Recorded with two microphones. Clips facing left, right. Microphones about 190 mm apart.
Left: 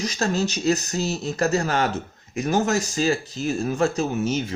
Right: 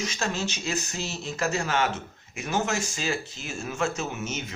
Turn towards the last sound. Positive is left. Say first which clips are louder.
# left 9 dB
turn(degrees=35)  # may be behind; listen again after turning